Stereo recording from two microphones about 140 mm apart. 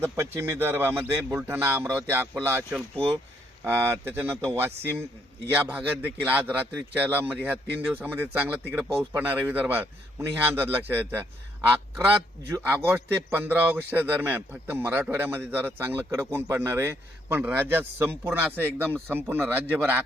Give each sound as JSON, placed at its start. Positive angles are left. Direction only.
{"t": 0.0, "sound": "a man's voice", "side_deg": -20}
{"t": 12.5, "sound": "a man's voice", "side_deg": -15}